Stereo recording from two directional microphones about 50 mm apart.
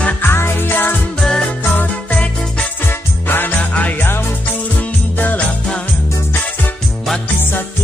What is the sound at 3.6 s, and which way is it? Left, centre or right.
Music, left.